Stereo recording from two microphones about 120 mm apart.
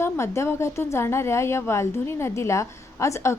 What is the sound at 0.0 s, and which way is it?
A woman's voice, 20° left (ahead or behind).